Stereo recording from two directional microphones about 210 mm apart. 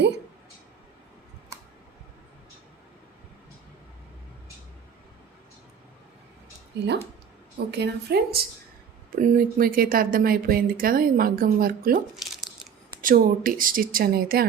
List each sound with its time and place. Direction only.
6.7 s speech: 55° right (ahead or behind)